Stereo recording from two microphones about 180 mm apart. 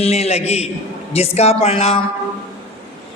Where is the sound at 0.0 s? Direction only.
35° left (ahead or behind).